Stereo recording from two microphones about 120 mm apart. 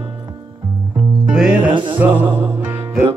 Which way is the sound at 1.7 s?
40° right (ahead or behind).